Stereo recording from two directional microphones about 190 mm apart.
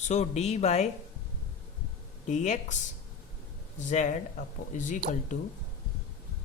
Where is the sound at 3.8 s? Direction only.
40° left (ahead or behind).